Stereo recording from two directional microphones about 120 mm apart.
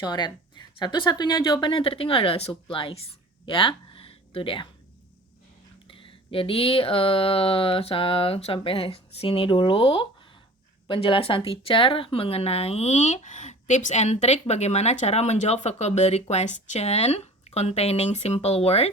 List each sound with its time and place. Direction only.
0.0 s speech: 35° left (ahead or behind)
5.9 s a sound: 50° left (ahead or behind)
10.8 s a woman's voice: 45° left (ahead or behind)